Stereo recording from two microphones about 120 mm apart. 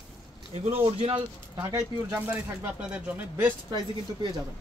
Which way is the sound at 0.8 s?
50° right (ahead or behind).